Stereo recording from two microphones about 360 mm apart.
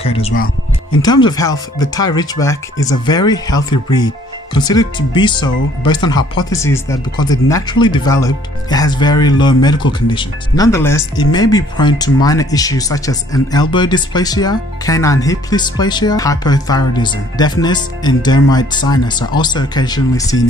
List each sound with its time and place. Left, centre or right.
0.0 s speech: centre